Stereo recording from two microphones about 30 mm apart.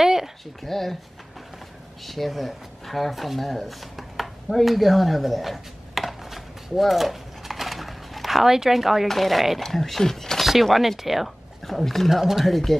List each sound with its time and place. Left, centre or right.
0.0 s a sound: centre
0.7 s speech: centre
2.0 s a sound: centre
8.5 s speech: centre
9.0 s speech: centre
10.6 s speech: centre
11.6 s speech: centre
12.1 s speech: centre
12.4 s speech: centre